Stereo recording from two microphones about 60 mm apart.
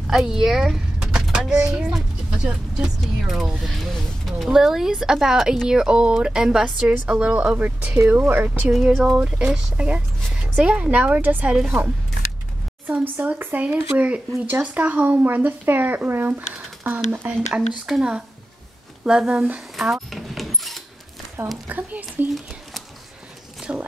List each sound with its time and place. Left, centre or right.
0.1 s door: centre
1.4 s speech: centre
3.0 s speech: centre
7.1 s a woman's voice: right
8.0 s a woman's voice: right
8.8 s speech: centre
9.1 s a woman's voice: centre
12.8 s a woman's voice: right
15.0 s a woman's voice: right
17.5 s speech: centre
19.8 s a sound: centre
21.6 s a woman's voice: right
23.7 s a woman's voice: right